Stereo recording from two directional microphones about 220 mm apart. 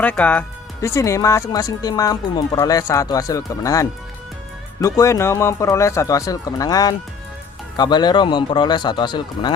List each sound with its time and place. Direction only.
0.0 s speech: 5° left (ahead or behind)